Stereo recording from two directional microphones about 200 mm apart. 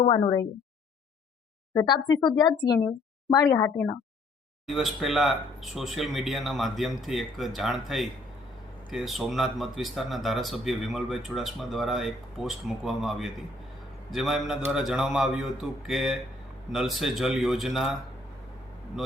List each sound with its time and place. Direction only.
0.0 s a woman's voice: 25° left (ahead or behind)
2.4 s a woman's voice: 20° left (ahead or behind)
4.6 s speech: centre (ahead or behind)